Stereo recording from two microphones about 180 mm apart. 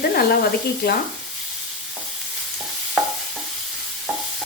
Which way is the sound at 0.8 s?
60° left (ahead or behind).